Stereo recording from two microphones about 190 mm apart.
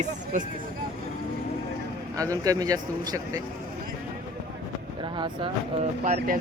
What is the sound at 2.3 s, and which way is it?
Speech, 20° right (ahead or behind).